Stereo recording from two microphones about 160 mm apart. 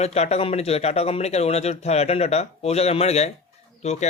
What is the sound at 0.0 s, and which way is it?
Speech, 40° left (ahead or behind).